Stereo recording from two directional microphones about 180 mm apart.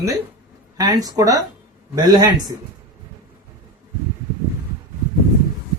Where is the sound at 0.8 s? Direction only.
20° right (ahead or behind).